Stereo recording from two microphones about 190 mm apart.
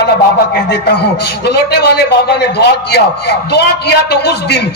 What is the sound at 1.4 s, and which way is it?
A man's voice, 60° left (ahead or behind).